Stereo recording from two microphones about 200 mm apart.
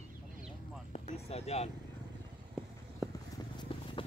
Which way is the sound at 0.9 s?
35° left (ahead or behind).